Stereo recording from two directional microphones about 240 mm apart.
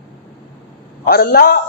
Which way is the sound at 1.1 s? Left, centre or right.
Left.